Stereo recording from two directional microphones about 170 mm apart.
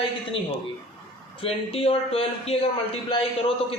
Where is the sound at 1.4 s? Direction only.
35° left (ahead or behind).